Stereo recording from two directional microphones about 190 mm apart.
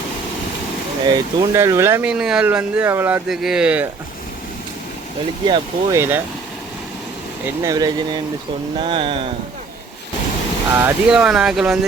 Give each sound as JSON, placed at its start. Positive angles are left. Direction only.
{"t": 1.0, "sound": "speech", "side_deg": -20}
{"t": 5.5, "sound": "speech", "side_deg": -15}
{"t": 7.4, "sound": "speech", "side_deg": -15}
{"t": 10.8, "sound": "speech", "side_deg": -10}